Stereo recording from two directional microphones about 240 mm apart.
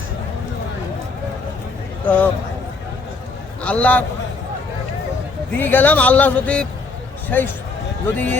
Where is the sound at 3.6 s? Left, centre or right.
Centre.